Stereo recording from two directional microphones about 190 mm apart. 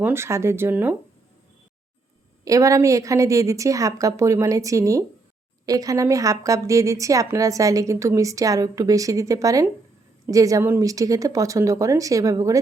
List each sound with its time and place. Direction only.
0.0 s a woman's voice: 15° right (ahead or behind)
2.4 s a woman's voice: 15° right (ahead or behind)